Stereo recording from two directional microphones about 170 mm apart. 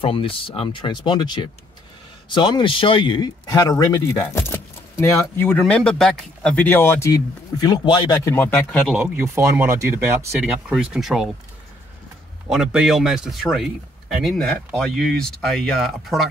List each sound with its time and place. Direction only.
0.0 s speech: 30° left (ahead or behind); by 8.9 s 5° left (ahead or behind)
8.9 s speech: 10° right (ahead or behind)
10.4 s speech: 5° right (ahead or behind)
12.4 s speech: 5° right (ahead or behind)